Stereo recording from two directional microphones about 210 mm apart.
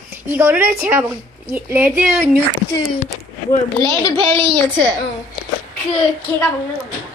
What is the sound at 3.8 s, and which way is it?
Speech, 20° right (ahead or behind).